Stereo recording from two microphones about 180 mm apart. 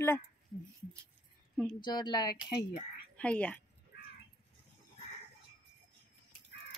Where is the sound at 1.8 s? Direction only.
25° left (ahead or behind).